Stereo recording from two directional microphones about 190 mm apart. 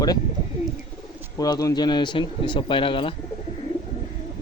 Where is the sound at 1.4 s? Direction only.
20° left (ahead or behind).